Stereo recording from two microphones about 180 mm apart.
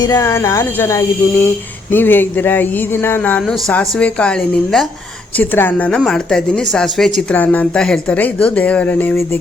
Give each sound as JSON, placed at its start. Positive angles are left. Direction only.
{"t": 0.0, "sound": "a woman's voice", "side_deg": 20}